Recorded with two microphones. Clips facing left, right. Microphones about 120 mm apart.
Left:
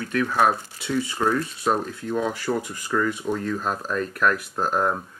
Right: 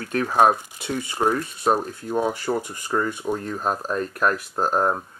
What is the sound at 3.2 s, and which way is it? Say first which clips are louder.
Speech: even; 35° right (ahead or behind).